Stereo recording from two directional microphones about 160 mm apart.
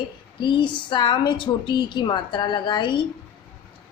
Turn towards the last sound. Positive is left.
turn(degrees=30)  # may be behind; listen again after turning